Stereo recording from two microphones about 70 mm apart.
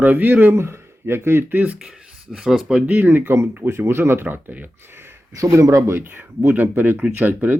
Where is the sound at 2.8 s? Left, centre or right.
Right.